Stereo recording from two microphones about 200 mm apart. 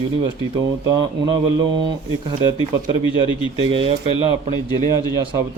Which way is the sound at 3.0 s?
25° left (ahead or behind).